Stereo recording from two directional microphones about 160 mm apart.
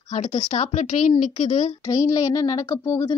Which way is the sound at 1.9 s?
20° left (ahead or behind).